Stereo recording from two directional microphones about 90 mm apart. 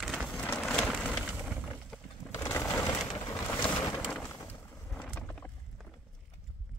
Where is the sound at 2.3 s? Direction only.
25° left (ahead or behind).